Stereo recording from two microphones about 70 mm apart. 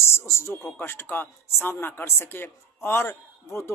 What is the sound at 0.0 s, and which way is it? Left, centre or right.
Speech, left.